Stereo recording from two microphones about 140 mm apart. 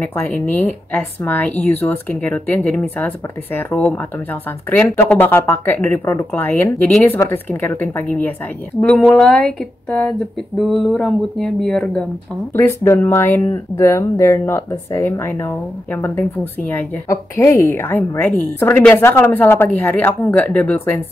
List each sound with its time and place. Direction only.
0.0 s speech: 15° left (ahead or behind)
12.5 s speech: 20° left (ahead or behind)